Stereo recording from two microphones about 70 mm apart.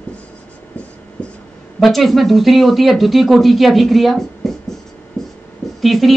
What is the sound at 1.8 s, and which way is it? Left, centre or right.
A woman's voice, centre.